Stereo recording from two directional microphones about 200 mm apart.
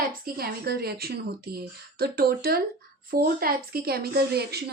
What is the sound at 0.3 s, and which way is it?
A woman's voice, 50° right (ahead or behind).